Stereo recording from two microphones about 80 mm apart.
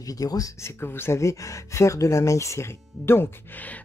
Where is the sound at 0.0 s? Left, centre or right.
Left.